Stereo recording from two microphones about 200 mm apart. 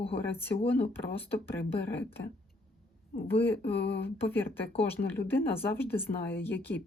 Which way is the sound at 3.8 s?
60° left (ahead or behind).